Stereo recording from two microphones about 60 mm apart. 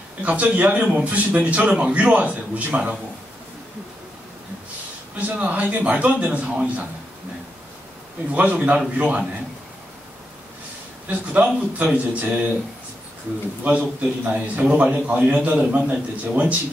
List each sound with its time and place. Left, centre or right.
0.2 s a man's voice: right
5.2 s a man's voice: right
8.3 s a man's voice: right
11.1 s a man's voice: right
13.7 s a man's voice: right